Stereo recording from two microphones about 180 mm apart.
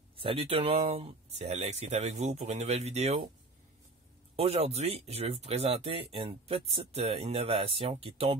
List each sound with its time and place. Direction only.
0.2 s speech: 30° right (ahead or behind)
4.4 s speech: 35° right (ahead or behind)